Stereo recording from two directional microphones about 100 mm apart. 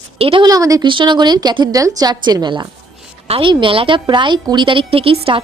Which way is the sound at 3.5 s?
60° right (ahead or behind).